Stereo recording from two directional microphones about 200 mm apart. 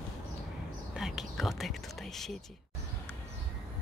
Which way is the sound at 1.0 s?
Centre (ahead or behind).